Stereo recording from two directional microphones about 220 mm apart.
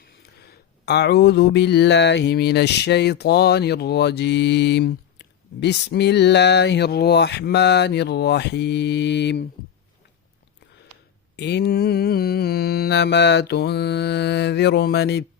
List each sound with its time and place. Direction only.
0.0 s speech: 45° left (ahead or behind)
11.3 s speech: 50° left (ahead or behind)